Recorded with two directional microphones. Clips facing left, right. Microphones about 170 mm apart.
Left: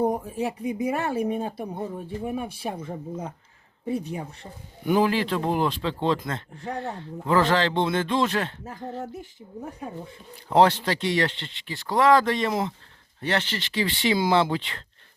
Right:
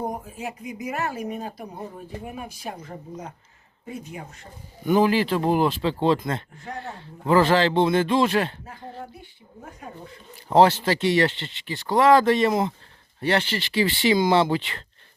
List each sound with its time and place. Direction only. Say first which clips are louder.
0.0 s speech: left 6 dB; 35° left (ahead or behind)
3.8 s speech: left 7 dB; 35° left (ahead or behind)
4.9 s speech: right 2 dB; centre (ahead or behind)
7.3 s speech: right 3 dB; 10° right (ahead or behind)
8.6 s speech: left 4 dB; 45° left (ahead or behind)
10.5 s speech: right 2 dB; 5° right (ahead or behind)